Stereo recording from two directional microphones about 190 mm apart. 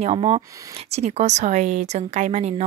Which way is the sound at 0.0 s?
30° right (ahead or behind).